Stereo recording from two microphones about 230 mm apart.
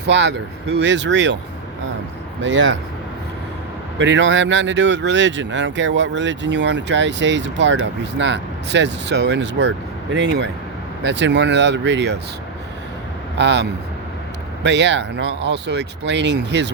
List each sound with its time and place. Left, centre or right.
0.1 s speech: right
2.4 s speech: right
3.9 s speech: right
13.4 s speech: right